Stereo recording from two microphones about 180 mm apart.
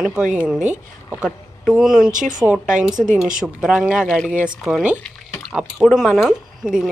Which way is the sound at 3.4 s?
5° right (ahead or behind).